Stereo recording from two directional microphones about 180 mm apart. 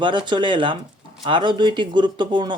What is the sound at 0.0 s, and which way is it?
Speech, 25° right (ahead or behind).